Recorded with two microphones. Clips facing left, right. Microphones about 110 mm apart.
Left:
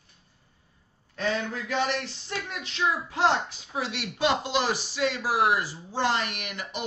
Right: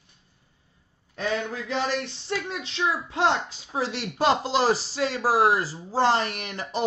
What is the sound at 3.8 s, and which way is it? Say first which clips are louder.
A man's voice: right 3 dB; 35° right (ahead or behind).